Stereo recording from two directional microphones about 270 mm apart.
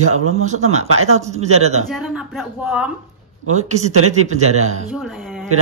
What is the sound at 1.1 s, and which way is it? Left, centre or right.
Speech, right.